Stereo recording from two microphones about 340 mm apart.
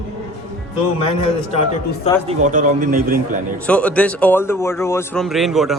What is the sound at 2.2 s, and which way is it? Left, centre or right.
Speech, right.